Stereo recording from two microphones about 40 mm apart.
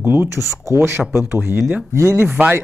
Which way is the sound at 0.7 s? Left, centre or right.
Right.